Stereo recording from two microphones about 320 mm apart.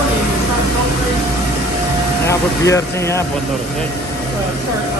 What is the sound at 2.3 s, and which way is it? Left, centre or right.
Speech, centre.